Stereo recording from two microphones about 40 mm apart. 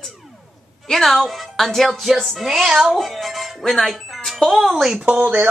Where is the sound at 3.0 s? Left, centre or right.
Centre.